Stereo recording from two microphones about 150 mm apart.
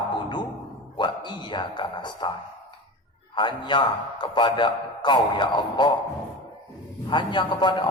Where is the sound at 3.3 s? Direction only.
30° left (ahead or behind).